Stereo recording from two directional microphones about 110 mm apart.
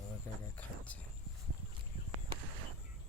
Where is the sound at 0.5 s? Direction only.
15° left (ahead or behind).